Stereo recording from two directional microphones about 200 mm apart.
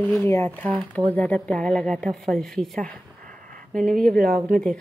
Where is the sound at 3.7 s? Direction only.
5° left (ahead or behind).